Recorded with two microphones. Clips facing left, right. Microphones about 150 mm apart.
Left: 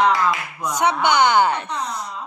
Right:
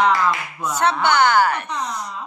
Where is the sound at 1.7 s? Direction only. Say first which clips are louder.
Even; 5° left (ahead or behind).